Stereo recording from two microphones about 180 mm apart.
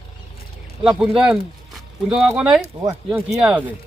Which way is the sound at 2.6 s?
20° right (ahead or behind).